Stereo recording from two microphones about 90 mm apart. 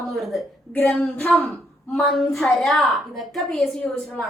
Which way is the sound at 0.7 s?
15° left (ahead or behind).